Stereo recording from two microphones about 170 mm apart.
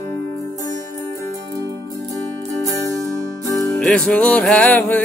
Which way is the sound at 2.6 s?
20° right (ahead or behind).